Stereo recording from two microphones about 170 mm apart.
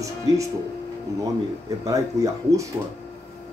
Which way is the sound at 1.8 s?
20° right (ahead or behind).